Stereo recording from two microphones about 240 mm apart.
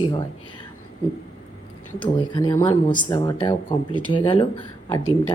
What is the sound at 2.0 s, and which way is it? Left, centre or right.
Speech, centre.